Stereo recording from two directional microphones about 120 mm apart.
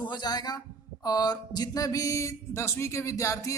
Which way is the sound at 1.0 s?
35° left (ahead or behind).